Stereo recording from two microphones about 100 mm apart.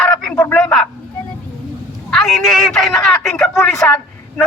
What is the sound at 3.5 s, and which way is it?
Speech, 25° left (ahead or behind).